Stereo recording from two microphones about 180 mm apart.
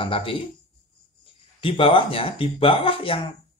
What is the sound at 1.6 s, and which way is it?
Speech, 30° left (ahead or behind).